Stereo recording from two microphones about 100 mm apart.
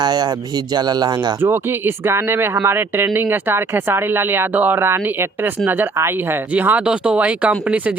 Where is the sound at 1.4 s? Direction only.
20° right (ahead or behind).